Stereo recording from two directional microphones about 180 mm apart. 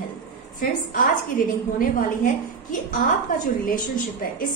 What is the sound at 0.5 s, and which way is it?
A woman's voice, 50° left (ahead or behind).